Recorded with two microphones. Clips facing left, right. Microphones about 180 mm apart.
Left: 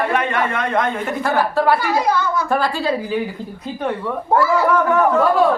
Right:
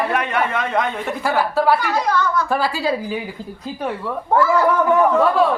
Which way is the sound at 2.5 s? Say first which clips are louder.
Left 1 dB; 5° right (ahead or behind).